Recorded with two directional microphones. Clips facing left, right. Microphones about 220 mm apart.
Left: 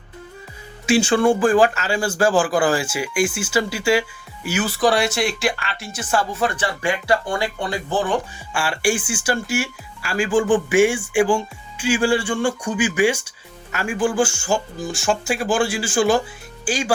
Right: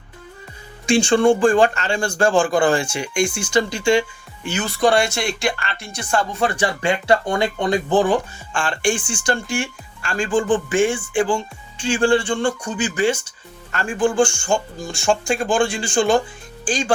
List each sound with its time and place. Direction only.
0.9 s speech: 5° left (ahead or behind)
6.6 s speech: 25° right (ahead or behind)
8.5 s speech: 10° left (ahead or behind)